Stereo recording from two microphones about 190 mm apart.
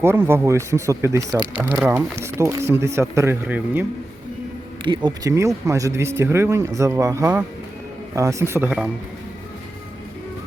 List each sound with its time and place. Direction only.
0.0 s speech: 10° right (ahead or behind)
4.8 s speech: 25° right (ahead or behind); by 8.9 s 5° right (ahead or behind)